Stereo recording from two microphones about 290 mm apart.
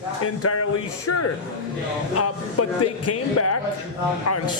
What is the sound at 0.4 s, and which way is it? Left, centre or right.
A man's voice, left.